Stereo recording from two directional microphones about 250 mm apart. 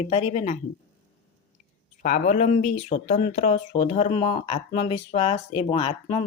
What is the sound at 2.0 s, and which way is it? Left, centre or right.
Speech, left.